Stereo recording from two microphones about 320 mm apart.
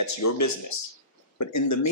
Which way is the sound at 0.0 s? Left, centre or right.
Left.